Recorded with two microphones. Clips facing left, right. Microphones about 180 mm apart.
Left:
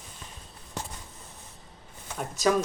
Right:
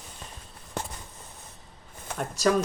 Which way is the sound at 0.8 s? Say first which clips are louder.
Right 3 dB; 60° right (ahead or behind).